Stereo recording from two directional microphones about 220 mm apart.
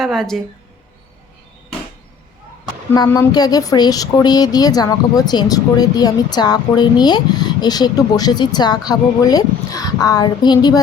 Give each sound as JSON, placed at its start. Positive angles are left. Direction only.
{"t": 0.0, "sound": "speech", "side_deg": 0}
{"t": 2.9, "sound": "speech", "side_deg": 15}